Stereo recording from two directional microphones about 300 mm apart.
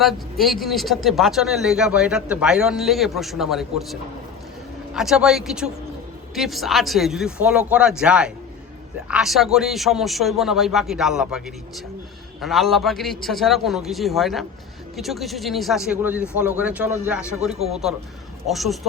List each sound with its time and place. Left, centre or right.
0.0 s speech: centre
4.9 s speech: centre
17.5 s speech: right
18.4 s speech: centre